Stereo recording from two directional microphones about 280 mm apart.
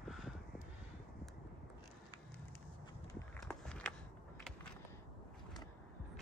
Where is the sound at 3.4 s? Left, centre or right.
Centre.